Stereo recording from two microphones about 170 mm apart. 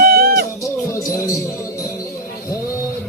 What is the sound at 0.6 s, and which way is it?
Music, 20° left (ahead or behind).